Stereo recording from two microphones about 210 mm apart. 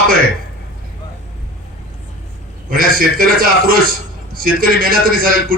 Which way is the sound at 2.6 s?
45° right (ahead or behind).